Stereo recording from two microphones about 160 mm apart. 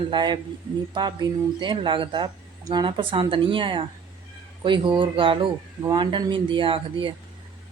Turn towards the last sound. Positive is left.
turn(degrees=-30)  # may be behind; listen again after turning